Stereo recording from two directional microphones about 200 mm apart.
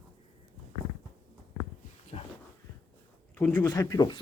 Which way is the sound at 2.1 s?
30° left (ahead or behind).